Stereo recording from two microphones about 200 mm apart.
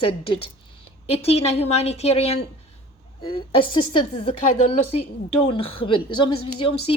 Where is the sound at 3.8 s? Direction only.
25° left (ahead or behind).